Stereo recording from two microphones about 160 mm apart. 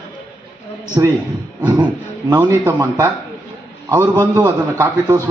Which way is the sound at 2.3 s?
25° right (ahead or behind).